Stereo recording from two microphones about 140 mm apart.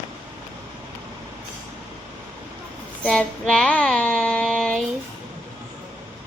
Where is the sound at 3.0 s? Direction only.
5° left (ahead or behind).